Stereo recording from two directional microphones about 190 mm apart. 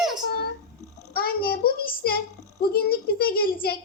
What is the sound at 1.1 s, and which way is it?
A child's voice, 50° left (ahead or behind).